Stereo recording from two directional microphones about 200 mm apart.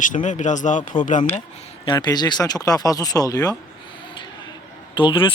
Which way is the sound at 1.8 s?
20° left (ahead or behind).